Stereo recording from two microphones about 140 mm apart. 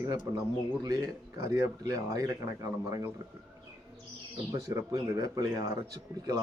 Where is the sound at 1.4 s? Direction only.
20° right (ahead or behind).